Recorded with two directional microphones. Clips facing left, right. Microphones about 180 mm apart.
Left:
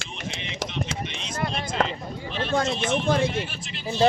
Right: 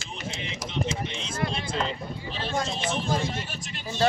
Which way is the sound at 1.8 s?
35° right (ahead or behind).